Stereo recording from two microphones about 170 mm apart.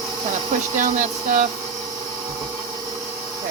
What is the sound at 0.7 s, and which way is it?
Speech, 50° right (ahead or behind).